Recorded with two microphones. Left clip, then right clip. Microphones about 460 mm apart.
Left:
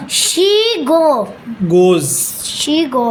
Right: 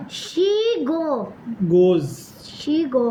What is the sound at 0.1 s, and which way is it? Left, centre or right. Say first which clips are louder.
A child's voice: left 8 dB; right.